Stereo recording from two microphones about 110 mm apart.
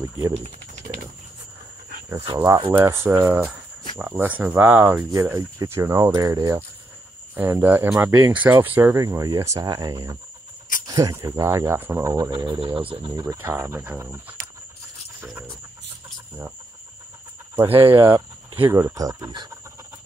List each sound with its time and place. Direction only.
2.2 s speech: 35° right (ahead or behind)
2.8 s speech: 20° right (ahead or behind)
5.1 s speech: 30° right (ahead or behind)
7.3 s speech: 20° right (ahead or behind)
8.9 s speech: 35° right (ahead or behind)
12.3 s speech: 45° right (ahead or behind)
13.1 s speech: 35° right (ahead or behind)
13.4 s speech: 25° right (ahead or behind)
17.6 s speech: 55° right (ahead or behind)
18.0 s speech: 20° right (ahead or behind); by 19.5 s 35° right (ahead or behind)